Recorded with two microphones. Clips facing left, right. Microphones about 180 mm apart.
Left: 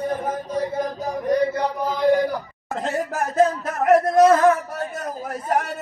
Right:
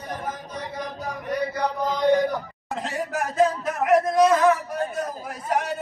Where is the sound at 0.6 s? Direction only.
40° left (ahead or behind).